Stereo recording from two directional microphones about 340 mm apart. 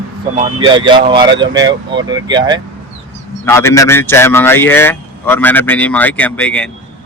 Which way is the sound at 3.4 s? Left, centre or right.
Centre.